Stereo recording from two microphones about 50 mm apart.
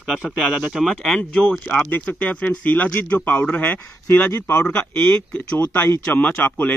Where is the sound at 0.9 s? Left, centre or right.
Centre.